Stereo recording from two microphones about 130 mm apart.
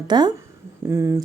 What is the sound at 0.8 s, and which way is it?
Speech, 20° right (ahead or behind).